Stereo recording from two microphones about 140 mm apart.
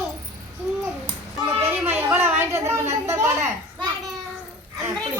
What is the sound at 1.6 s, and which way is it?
A woman's voice, 15° right (ahead or behind).